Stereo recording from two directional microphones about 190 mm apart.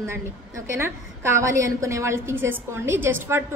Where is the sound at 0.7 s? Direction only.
15° right (ahead or behind).